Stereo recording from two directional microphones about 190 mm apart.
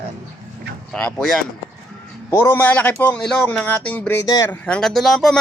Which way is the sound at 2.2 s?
15° left (ahead or behind).